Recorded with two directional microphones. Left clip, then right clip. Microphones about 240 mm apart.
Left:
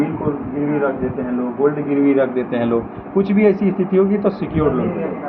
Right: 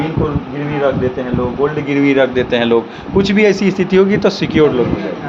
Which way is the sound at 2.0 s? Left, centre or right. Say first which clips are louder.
Right 5 dB; right.